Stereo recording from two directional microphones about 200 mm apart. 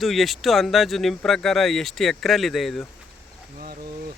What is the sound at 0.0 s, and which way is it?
Speech, centre (ahead or behind).